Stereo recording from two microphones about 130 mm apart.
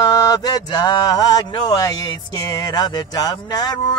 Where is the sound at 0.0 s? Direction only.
30° left (ahead or behind).